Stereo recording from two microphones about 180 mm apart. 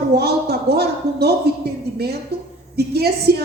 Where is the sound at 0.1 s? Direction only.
60° right (ahead or behind).